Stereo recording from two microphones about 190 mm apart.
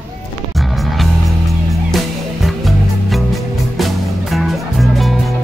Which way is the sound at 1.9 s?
Centre (ahead or behind).